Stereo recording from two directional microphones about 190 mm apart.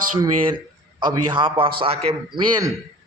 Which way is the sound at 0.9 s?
25° right (ahead or behind).